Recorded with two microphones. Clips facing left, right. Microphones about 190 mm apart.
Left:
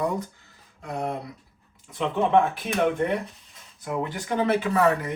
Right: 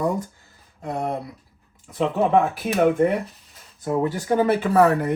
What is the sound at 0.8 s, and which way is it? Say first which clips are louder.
Speech: right 3 dB; 45° right (ahead or behind).